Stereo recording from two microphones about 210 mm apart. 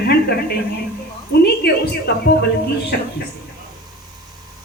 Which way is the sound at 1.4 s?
50° left (ahead or behind).